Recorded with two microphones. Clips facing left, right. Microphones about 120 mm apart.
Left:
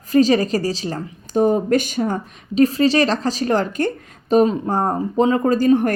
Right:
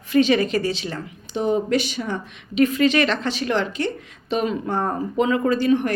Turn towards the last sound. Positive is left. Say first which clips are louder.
# left 4 dB
turn(degrees=40)  # may be behind; listen again after turning